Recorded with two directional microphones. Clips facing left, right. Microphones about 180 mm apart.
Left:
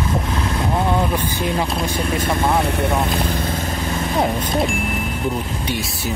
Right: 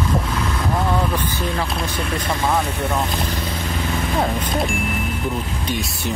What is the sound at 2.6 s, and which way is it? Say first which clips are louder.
Speech: left 3 dB; 60° left (ahead or behind).